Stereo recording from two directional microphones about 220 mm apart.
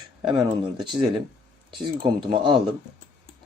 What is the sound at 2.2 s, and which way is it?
Speech, 20° right (ahead or behind).